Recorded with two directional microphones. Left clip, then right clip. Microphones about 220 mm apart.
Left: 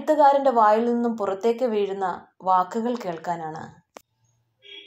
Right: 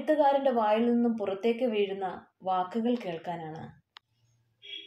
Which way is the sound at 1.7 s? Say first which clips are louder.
Left 5 dB; 35° left (ahead or behind).